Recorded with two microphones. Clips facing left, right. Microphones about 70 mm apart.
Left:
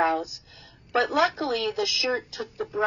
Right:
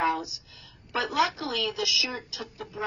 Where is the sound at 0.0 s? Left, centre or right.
Left.